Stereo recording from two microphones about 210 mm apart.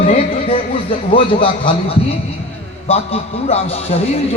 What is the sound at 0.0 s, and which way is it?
Speech, 25° left (ahead or behind).